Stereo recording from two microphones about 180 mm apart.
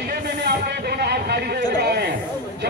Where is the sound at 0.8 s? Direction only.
65° right (ahead or behind).